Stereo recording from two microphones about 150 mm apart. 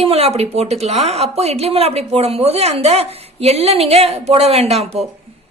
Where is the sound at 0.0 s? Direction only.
40° right (ahead or behind).